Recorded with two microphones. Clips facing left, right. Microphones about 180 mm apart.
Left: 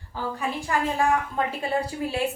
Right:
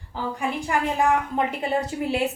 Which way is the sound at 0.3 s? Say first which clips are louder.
Right 2 dB; 15° right (ahead or behind).